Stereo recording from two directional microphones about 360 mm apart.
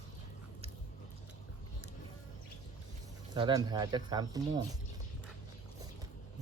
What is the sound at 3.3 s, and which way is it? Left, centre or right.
Speech, centre.